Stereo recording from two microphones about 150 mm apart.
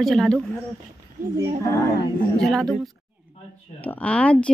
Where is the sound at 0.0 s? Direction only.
Centre (ahead or behind).